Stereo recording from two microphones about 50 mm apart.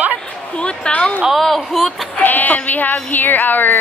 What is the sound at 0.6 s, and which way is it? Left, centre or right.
Speech, centre.